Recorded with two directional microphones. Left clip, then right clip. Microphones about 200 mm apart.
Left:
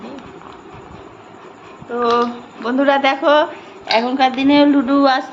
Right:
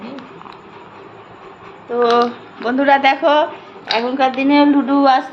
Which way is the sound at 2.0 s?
Centre (ahead or behind).